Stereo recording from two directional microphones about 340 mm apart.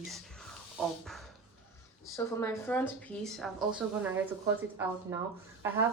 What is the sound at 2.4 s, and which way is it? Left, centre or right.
Speech, centre.